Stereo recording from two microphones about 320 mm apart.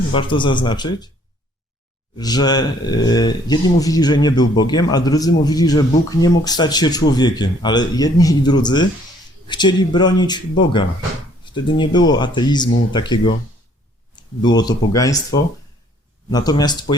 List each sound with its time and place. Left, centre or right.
0.1 s speech: centre
2.1 s speech: centre